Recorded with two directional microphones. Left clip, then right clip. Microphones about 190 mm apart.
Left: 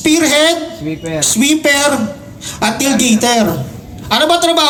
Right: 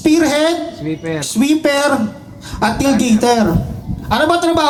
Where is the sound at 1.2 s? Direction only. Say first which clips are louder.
Left 3 dB; 40° right (ahead or behind).